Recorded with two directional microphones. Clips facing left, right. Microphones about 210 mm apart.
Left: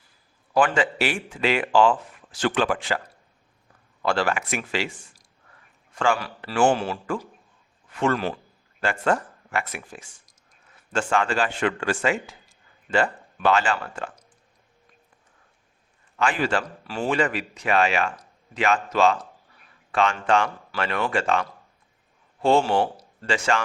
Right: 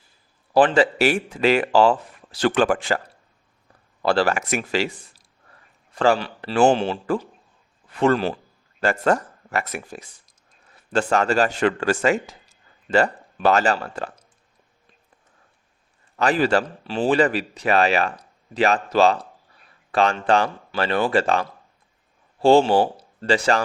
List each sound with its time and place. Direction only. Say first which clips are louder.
0.5 s speech: right 5 dB; 35° right (ahead or behind)
4.0 s a man's voice: right 4 dB; 35° right (ahead or behind)
16.1 s speech: right 5 dB; 35° right (ahead or behind)
16.8 s a man's voice: right 5 dB; 25° right (ahead or behind)
17.2 s a man's voice: right 5 dB; 35° right (ahead or behind)